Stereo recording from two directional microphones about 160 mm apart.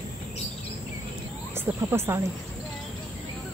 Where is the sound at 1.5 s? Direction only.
15° right (ahead or behind).